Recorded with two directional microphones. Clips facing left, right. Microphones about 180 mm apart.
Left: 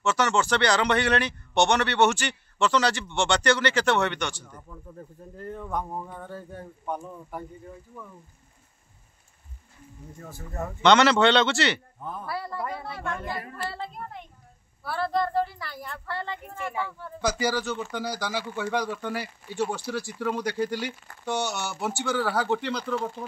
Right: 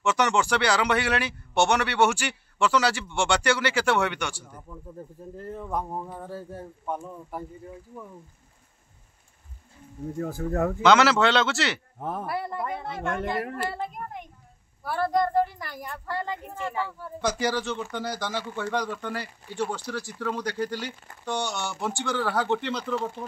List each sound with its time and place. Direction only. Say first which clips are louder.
0.0 s speech: right 1 dB; 15° right (ahead or behind)
10.1 s speech: right 10 dB; 65° right (ahead or behind)
10.8 s speech: left 1 dB; 5° right (ahead or behind)
12.0 s speech: right 4 dB; 80° right
12.4 s speech: right 2 dB; 20° right (ahead or behind)
13.2 s speech: right 6 dB; 75° right (ahead or behind)
13.7 s speech: right 3 dB; 15° right (ahead or behind)
16.5 s speech: even; 10° left (ahead or behind)